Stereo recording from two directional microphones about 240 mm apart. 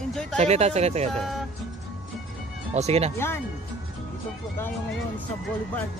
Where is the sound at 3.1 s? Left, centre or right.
Centre.